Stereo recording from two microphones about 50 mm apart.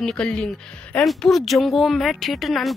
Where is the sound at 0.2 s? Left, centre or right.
Centre.